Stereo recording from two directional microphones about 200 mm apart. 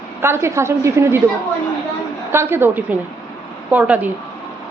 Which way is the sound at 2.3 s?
10° right (ahead or behind).